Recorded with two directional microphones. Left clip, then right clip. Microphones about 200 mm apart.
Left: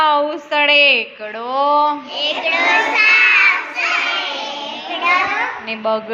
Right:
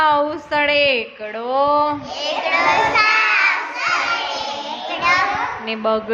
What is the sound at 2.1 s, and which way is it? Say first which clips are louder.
Speech: left 2 dB; 40° right (ahead or behind).